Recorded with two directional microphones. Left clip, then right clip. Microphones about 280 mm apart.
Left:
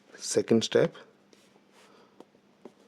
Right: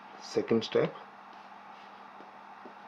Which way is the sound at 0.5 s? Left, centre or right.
Left.